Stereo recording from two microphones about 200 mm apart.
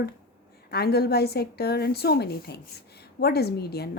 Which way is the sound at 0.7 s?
50° left (ahead or behind).